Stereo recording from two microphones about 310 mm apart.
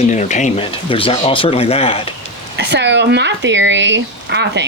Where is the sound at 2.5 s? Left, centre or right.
Right.